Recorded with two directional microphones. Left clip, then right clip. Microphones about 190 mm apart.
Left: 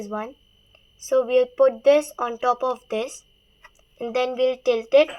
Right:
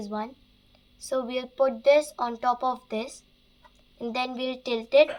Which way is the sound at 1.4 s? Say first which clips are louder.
Left 7 dB; 40° left (ahead or behind).